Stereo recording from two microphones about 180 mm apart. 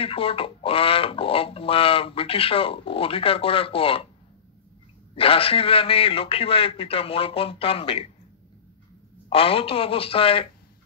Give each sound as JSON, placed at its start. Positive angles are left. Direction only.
{"t": 0.0, "sound": "speech", "side_deg": 30}
{"t": 5.1, "sound": "speech", "side_deg": 30}
{"t": 9.3, "sound": "speech", "side_deg": 30}